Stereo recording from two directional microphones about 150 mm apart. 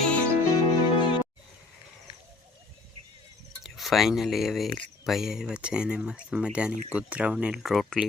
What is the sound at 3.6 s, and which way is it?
Speech, centre (ahead or behind).